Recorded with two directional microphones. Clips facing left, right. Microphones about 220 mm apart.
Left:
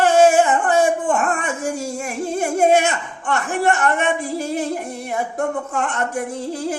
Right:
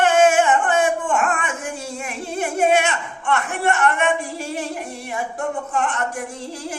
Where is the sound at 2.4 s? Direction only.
40° left (ahead or behind).